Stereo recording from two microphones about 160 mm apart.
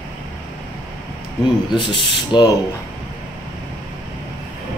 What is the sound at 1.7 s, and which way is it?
Speech, 30° left (ahead or behind).